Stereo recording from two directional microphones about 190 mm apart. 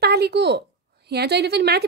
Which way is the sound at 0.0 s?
55° right (ahead or behind).